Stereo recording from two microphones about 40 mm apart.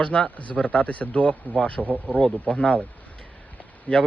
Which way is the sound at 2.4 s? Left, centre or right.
Left.